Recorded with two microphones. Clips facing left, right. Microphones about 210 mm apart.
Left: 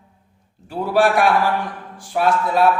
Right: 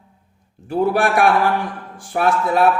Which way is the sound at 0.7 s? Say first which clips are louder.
Even; 55° right (ahead or behind).